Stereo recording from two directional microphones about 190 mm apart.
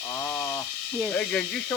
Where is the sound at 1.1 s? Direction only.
5° left (ahead or behind).